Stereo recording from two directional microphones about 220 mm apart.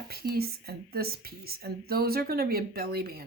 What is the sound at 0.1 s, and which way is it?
Speech, 45° right (ahead or behind).